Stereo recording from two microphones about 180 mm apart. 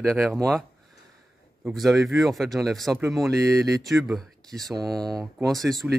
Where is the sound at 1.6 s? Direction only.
Centre (ahead or behind).